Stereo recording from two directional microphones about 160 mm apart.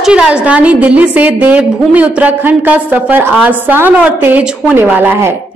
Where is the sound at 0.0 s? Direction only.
5° right (ahead or behind).